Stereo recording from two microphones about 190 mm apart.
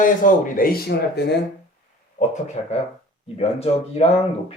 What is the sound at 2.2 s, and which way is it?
Speech, 40° left (ahead or behind).